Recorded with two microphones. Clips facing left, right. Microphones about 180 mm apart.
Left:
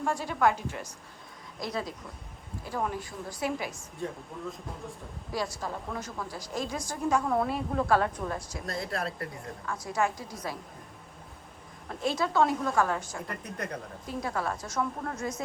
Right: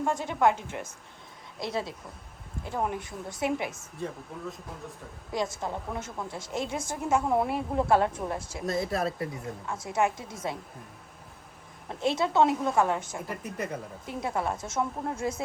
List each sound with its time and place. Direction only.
0.0 s a woman's voice: 20° right (ahead or behind)
2.6 s a woman's voice: 20° right (ahead or behind)
4.0 s speech: centre (ahead or behind)
5.3 s a woman's voice: 20° right (ahead or behind)
8.9 s speech: 5° right (ahead or behind)
9.2 s a woman's voice: 20° right (ahead or behind)
11.9 s a woman's voice: 25° right (ahead or behind)
13.2 s speech: 5° right (ahead or behind)
14.3 s a woman's voice: 25° right (ahead or behind)